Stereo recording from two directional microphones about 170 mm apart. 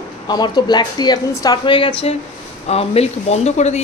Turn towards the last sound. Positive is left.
turn(degrees=40)  # may be behind; listen again after turning